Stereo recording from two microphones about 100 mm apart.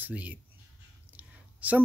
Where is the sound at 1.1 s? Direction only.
15° right (ahead or behind).